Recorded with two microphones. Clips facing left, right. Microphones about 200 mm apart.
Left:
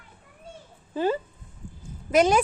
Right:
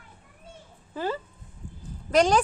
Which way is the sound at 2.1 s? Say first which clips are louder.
Left 1 dB; 5° left (ahead or behind).